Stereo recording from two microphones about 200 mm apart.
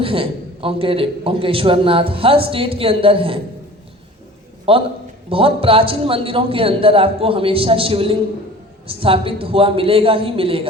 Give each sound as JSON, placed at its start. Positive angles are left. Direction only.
{"t": 0.0, "sound": "a man's voice", "side_deg": -25}
{"t": 4.7, "sound": "a man's voice", "side_deg": -25}